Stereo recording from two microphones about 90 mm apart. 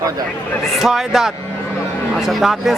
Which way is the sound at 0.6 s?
Centre (ahead or behind).